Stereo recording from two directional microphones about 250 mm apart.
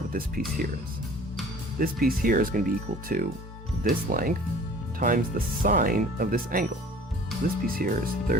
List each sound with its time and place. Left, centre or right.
0.1 s speech: right
1.8 s speech: right